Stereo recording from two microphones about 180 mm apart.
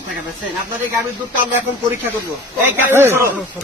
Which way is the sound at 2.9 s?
15° right (ahead or behind).